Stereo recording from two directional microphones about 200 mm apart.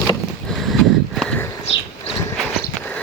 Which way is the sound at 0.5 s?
Centre (ahead or behind).